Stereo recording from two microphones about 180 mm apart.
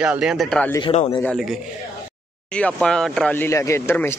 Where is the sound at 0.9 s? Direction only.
35° left (ahead or behind).